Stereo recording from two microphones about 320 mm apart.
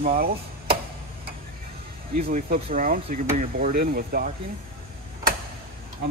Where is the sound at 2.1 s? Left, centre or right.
Right.